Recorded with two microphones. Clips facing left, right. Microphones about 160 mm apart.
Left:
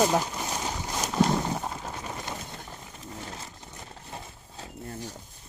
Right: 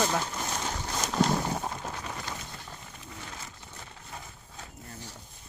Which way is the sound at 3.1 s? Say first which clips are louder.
Left 4 dB; 35° left (ahead or behind).